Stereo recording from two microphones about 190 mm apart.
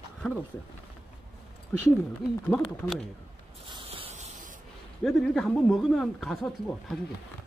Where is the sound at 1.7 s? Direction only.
10° left (ahead or behind).